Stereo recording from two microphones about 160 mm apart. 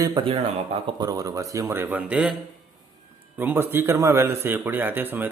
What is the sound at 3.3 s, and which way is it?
A man's voice, 15° right (ahead or behind).